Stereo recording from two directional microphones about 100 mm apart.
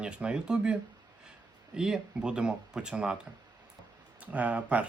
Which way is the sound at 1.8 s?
5° right (ahead or behind).